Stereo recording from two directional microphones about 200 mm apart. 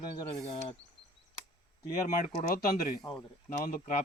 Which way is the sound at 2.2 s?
45° left (ahead or behind).